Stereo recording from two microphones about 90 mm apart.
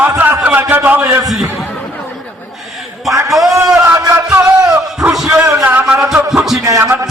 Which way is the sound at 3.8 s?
25° right (ahead or behind).